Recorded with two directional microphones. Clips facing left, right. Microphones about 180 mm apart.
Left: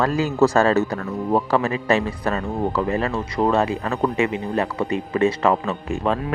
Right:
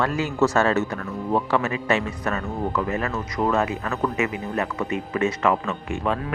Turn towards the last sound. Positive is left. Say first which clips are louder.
# left 3 dB
turn(degrees=35)  # may be behind; listen again after turning